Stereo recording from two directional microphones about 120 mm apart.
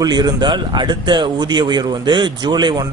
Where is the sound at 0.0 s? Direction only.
35° right (ahead or behind).